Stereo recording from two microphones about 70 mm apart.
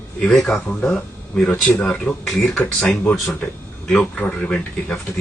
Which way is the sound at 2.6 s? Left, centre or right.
Left.